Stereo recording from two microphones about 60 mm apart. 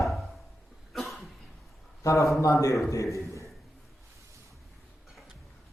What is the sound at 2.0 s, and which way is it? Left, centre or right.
Speech, left.